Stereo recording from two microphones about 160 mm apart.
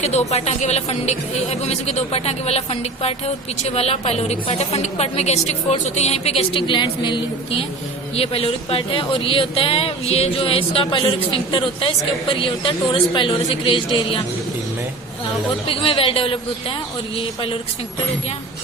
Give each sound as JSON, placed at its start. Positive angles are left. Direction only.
{"t": 0.0, "sound": "a woman's voice", "side_deg": 45}
{"t": 12.3, "sound": "a woman's voice", "side_deg": 35}
{"t": 15.7, "sound": "a woman's voice", "side_deg": 35}